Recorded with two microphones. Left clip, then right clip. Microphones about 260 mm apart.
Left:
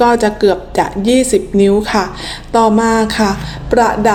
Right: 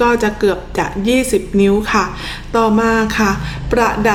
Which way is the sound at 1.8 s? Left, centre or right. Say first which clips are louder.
Even; right.